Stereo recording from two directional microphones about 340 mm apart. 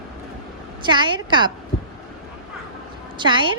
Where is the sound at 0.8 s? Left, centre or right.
Centre.